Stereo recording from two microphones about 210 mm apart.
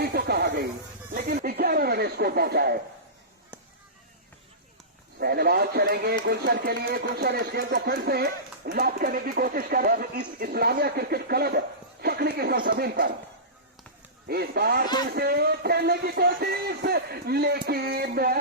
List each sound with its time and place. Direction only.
0.0 s snake: 50° right (ahead or behind)
1.1 s speech: 40° right (ahead or behind)
5.2 s speech: 50° right (ahead or behind)
14.3 s speech: 50° right (ahead or behind)